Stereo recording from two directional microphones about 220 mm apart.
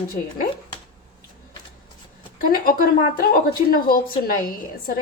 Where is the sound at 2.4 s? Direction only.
40° left (ahead or behind).